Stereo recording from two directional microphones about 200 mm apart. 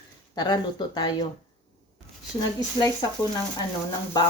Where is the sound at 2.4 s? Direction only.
20° left (ahead or behind).